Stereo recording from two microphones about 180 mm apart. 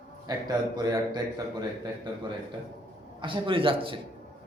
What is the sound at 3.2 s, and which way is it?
Speech, 30° right (ahead or behind).